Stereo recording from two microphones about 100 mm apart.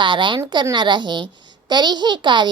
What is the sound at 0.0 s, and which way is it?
A child's voice, 50° right (ahead or behind).